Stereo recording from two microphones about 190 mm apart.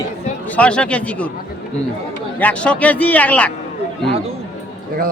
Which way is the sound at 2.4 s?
10° left (ahead or behind).